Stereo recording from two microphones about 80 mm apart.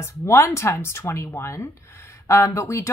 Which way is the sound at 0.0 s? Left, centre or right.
Left.